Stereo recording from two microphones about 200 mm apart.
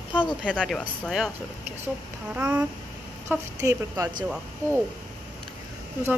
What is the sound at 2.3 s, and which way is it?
Speech, 10° right (ahead or behind).